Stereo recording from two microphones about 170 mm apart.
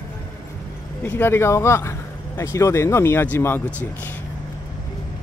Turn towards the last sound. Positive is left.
turn(degrees=10)  # may be behind; listen again after turning